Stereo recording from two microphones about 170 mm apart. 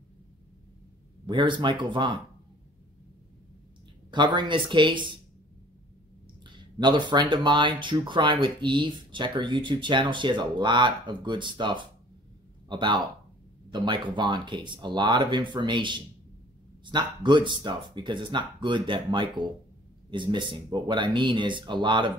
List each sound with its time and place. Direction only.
1.2 s speech: 30° right (ahead or behind)
4.1 s speech: 25° right (ahead or behind)
6.4 s speech: 25° right (ahead or behind)